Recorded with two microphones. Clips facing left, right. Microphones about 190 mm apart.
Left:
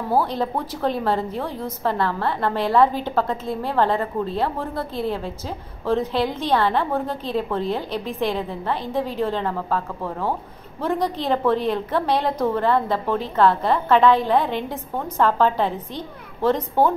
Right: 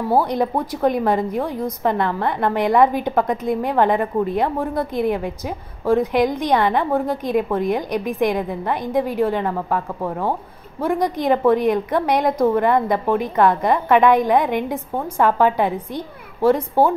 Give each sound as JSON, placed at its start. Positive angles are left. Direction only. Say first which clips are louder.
{"t": 0.1, "sound": "a woman's voice", "louder": "right 3 dB", "side_deg": -15}